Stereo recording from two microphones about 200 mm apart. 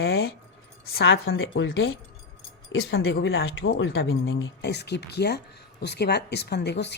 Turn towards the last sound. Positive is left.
turn(degrees=60)  # may be behind; listen again after turning